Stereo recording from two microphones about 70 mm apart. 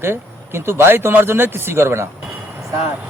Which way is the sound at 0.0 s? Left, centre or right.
Right.